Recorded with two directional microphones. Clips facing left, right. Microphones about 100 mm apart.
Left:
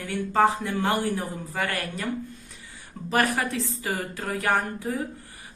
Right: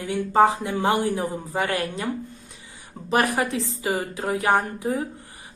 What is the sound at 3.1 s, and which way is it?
Speech, 20° right (ahead or behind).